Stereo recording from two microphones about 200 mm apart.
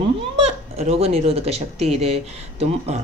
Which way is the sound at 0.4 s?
30° right (ahead or behind).